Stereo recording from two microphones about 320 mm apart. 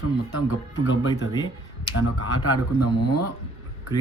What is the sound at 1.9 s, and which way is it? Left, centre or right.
Speech, left.